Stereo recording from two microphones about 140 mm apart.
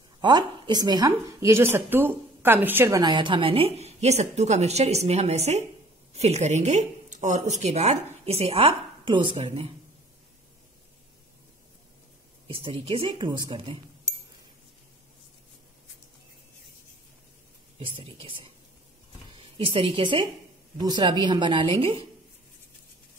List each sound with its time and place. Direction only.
0.2 s a woman's voice: 30° right (ahead or behind); by 3.0 s 15° right (ahead or behind)
3.0 s speech: 30° right (ahead or behind)
9.4 s speech: 50° right (ahead or behind)
12.4 s a woman's voice: 40° right (ahead or behind)
17.7 s a woman's voice: 40° right (ahead or behind)